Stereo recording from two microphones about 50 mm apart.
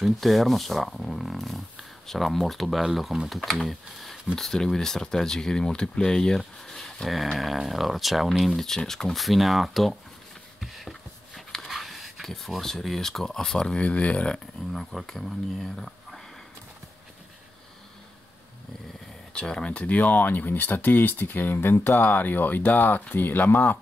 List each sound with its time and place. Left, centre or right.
0.0 s speech: centre
6.3 s a sound: centre
7.3 s speech: centre
10.6 s a sound: centre
13.7 s speech: left
14.7 s speech: centre
19.3 s speech: centre; by 21.9 s left
22.0 s speech: left